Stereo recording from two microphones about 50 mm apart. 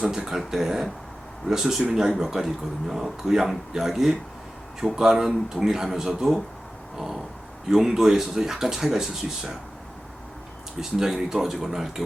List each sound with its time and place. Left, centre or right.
0.0 s speech: centre
0.3 s speech: centre
6.9 s a sound: centre
7.7 s speech: centre
10.8 s speech: centre